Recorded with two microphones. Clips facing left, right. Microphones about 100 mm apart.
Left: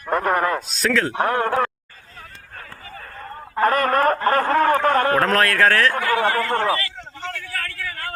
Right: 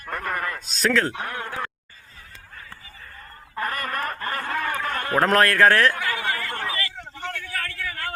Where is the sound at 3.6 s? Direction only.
55° left (ahead or behind).